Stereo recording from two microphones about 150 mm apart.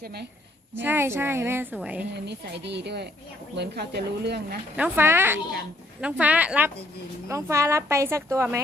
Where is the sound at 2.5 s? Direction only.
90° right.